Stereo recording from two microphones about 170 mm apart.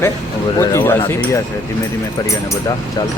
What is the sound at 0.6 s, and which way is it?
Speech, 15° left (ahead or behind).